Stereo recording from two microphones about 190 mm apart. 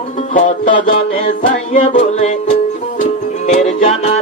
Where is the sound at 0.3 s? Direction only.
40° left (ahead or behind).